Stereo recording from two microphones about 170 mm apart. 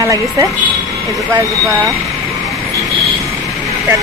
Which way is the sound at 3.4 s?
20° right (ahead or behind).